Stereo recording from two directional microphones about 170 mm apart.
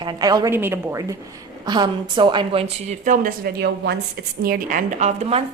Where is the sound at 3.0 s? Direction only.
50° right (ahead or behind); by 4.0 s 70° right (ahead or behind).